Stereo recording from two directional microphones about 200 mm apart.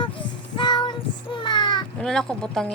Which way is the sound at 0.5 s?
25° left (ahead or behind).